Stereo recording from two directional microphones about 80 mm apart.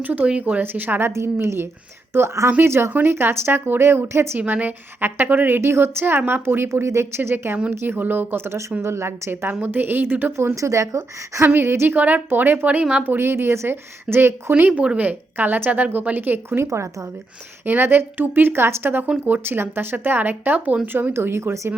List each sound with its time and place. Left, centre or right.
0.0 s a woman's voice: centre
4.4 s a woman's voice: right
13.1 s speech: right
14.8 s a woman's voice: centre
16.6 s speech: right
17.7 s a woman's voice: right